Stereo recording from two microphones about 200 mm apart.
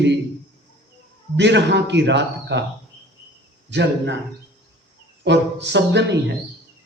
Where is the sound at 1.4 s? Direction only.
60° right (ahead or behind).